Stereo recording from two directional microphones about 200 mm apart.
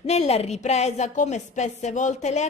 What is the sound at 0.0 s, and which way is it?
A woman's voice, 30° left (ahead or behind).